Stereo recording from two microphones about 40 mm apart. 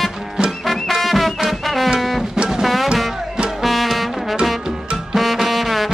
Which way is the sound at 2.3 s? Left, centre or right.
Centre.